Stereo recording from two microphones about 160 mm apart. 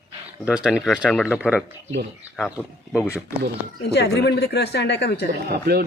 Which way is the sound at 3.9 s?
90° left.